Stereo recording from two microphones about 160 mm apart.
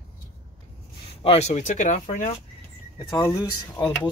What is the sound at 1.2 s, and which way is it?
Speech, 40° left (ahead or behind).